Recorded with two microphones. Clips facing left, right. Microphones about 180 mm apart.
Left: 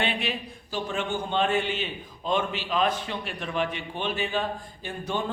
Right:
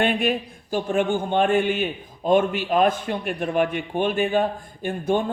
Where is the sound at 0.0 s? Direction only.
50° right (ahead or behind).